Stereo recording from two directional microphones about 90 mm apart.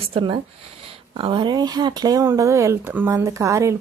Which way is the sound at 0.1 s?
70° right (ahead or behind).